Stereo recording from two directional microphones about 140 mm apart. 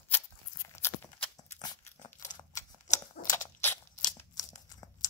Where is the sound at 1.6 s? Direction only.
30° left (ahead or behind).